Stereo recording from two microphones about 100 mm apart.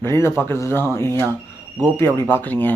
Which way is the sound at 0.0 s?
25° left (ahead or behind).